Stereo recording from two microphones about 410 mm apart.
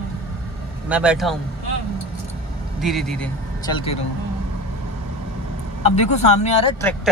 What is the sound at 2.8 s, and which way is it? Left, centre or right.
A man's voice, centre.